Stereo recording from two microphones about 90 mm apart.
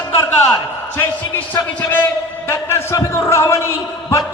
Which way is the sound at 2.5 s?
30° left (ahead or behind).